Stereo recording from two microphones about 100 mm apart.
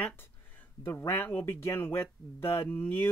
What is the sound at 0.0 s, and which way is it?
Speech, 20° left (ahead or behind).